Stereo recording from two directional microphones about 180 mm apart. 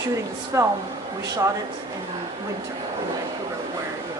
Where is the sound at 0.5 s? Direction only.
15° right (ahead or behind).